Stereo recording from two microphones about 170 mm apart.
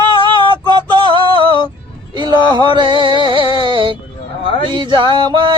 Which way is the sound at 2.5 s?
25° right (ahead or behind).